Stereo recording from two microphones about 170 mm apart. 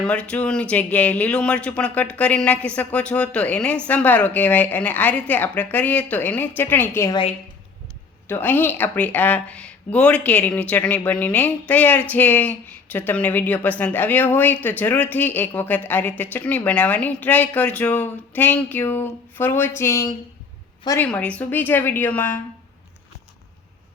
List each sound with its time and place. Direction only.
0.0 s a woman's voice: 5° left (ahead or behind)
8.3 s a woman's voice: 10° left (ahead or behind)